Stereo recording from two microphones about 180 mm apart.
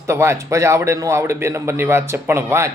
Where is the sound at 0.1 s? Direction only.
15° right (ahead or behind).